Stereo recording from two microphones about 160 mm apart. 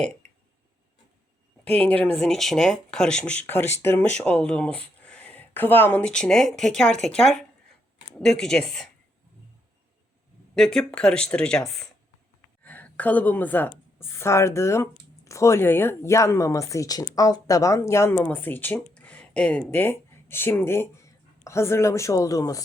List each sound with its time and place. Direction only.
1.6 s a woman's voice: 10° left (ahead or behind)
10.5 s a woman's voice: 5° left (ahead or behind); by 22.6 s 20° left (ahead or behind)